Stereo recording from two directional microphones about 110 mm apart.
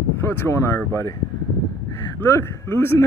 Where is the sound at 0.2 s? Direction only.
20° left (ahead or behind).